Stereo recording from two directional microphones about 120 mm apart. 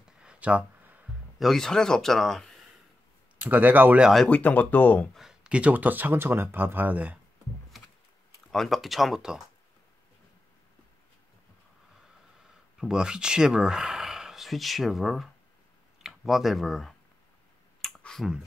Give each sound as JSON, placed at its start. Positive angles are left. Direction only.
{"t": 0.2, "sound": "a sound", "side_deg": -10}
{"t": 1.4, "sound": "speech", "side_deg": 5}
{"t": 3.3, "sound": "speech", "side_deg": -15}
{"t": 4.3, "sound": "speech", "side_deg": 15}
{"t": 5.1, "sound": "speech", "side_deg": -5}
{"t": 7.7, "sound": "computer keyboard", "side_deg": 0}
{"t": 8.5, "sound": "speech", "side_deg": 0}
{"t": 12.7, "sound": "speech", "side_deg": -5}
{"t": 17.8, "sound": "clicking", "side_deg": 5}